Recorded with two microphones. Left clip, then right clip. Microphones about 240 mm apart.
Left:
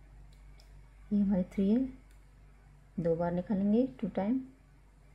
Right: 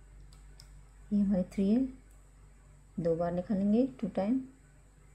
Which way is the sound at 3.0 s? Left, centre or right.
Centre.